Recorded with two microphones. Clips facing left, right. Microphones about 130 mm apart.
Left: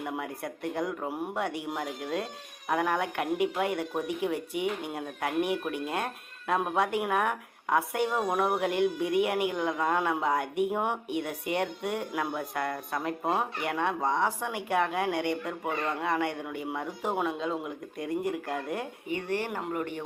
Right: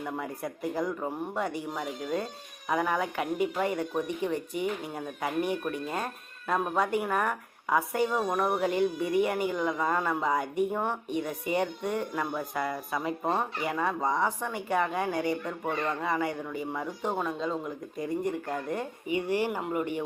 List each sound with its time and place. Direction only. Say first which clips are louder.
0.0 s speech: even; 5° left (ahead or behind)
19.1 s speech: right 3 dB; 10° right (ahead or behind)